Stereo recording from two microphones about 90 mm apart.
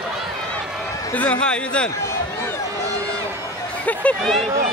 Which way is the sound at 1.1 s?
15° left (ahead or behind).